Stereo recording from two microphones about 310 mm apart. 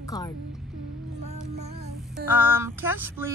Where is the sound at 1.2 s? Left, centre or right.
Right.